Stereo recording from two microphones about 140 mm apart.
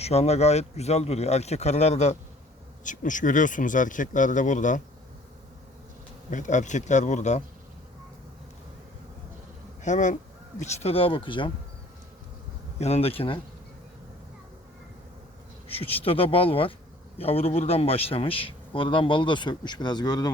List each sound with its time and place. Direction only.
0.0 s speech: 50° left (ahead or behind)
2.8 s speech: 65° left (ahead or behind)
6.3 s speech: 60° left (ahead or behind)
9.8 s speech: 60° left (ahead or behind)
10.6 s speech: 45° left (ahead or behind)
12.8 s speech: 45° left (ahead or behind)
15.7 s speech: 45° left (ahead or behind)